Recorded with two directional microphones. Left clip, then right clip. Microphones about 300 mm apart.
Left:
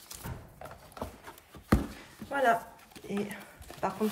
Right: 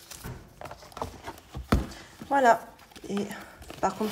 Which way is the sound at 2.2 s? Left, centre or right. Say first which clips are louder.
Right 6 dB; centre.